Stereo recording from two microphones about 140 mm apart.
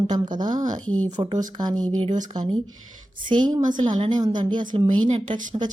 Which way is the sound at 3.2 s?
30° right (ahead or behind).